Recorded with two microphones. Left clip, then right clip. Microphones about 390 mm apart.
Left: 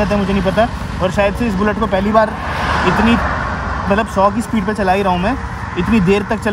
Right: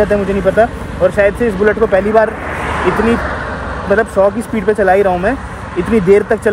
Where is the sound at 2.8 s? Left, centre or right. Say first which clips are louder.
Right 2 dB; left.